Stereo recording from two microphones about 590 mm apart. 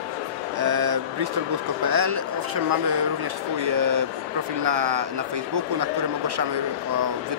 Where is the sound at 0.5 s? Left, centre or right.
Right.